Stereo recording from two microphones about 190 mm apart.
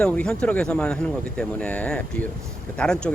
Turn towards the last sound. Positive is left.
turn(degrees=5)  # may be behind; listen again after turning